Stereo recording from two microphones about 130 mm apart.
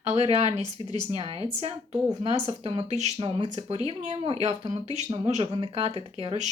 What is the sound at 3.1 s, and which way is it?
Speech, 35° right (ahead or behind).